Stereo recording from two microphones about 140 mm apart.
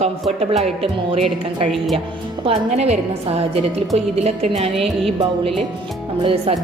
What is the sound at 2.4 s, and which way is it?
A woman's voice, 45° right (ahead or behind).